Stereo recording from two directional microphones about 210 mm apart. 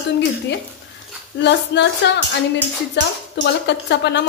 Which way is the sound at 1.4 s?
55° left (ahead or behind).